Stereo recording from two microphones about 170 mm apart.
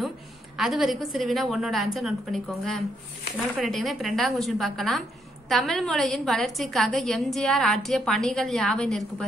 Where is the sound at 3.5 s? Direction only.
Centre (ahead or behind).